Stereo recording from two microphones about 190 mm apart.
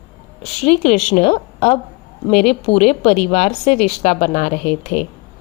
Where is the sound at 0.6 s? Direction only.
40° left (ahead or behind).